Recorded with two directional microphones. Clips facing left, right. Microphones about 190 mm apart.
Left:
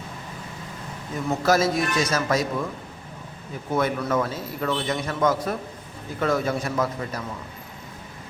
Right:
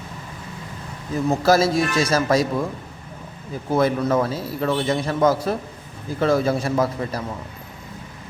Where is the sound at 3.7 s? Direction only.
30° right (ahead or behind).